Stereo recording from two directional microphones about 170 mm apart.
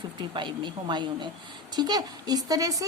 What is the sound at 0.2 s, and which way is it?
A woman's voice, 25° right (ahead or behind).